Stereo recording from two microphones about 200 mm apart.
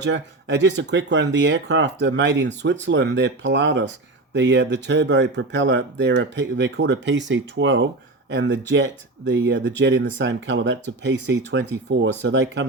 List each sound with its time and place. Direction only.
0.0 s speech: 65° right (ahead or behind)